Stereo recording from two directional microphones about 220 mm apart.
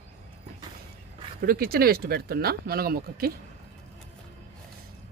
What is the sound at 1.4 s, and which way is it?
Speech, 45° right (ahead or behind).